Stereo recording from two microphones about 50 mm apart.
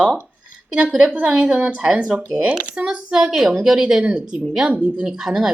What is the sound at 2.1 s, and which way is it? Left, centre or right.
Speech, right.